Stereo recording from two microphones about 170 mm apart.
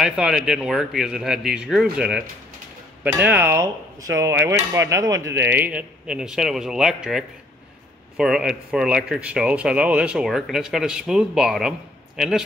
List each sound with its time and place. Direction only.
0.0 s speech: 5° right (ahead or behind)